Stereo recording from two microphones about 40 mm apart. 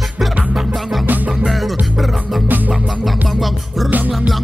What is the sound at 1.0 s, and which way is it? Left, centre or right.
Music, right.